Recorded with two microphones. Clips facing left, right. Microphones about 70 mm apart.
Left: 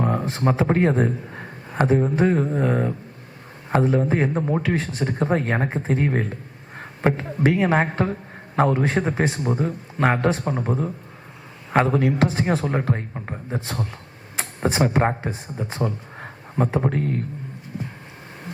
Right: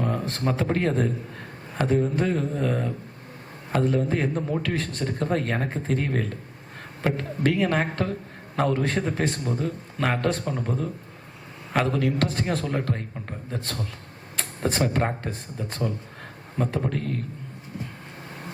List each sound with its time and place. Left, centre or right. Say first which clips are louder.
0.0 s a sound: left 4 dB; left
0.3 s a man's voice: left 5 dB; centre
4.6 s speech: left 4 dB; centre
13.6 s speech: left 4 dB; centre